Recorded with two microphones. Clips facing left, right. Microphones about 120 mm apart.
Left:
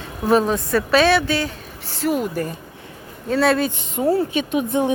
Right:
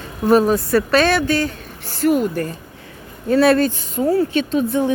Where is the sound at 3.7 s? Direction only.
25° left (ahead or behind).